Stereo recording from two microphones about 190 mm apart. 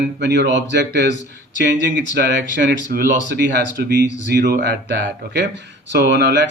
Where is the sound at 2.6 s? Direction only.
60° right (ahead or behind).